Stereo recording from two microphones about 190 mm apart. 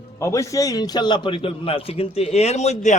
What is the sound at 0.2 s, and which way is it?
A man's voice, 15° left (ahead or behind).